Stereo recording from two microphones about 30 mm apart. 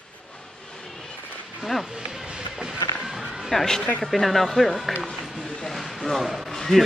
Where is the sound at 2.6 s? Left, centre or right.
Centre.